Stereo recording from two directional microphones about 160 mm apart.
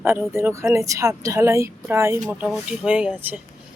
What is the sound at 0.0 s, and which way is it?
Speech, 15° right (ahead or behind).